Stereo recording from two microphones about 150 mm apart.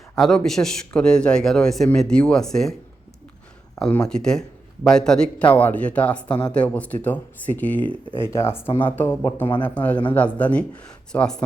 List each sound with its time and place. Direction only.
0.2 s speech: 5° left (ahead or behind)
3.8 s speech: 5° left (ahead or behind)